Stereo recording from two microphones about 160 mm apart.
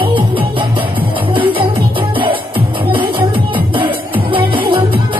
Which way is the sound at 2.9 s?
30° right (ahead or behind).